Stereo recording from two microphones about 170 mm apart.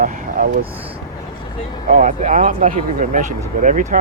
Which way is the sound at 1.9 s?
50° right (ahead or behind).